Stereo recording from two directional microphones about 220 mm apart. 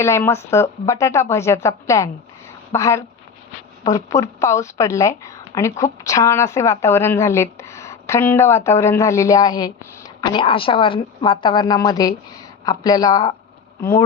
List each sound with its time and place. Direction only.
0.0 s a woman's voice: 10° left (ahead or behind)